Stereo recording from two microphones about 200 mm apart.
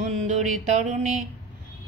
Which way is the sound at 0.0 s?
35° right (ahead or behind).